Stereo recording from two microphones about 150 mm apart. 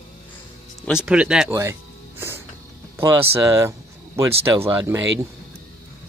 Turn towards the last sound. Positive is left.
turn(degrees=-20)  # may be behind; listen again after turning